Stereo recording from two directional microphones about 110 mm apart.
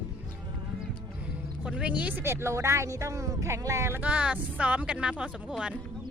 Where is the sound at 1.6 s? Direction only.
10° right (ahead or behind); by 4.0 s 25° right (ahead or behind).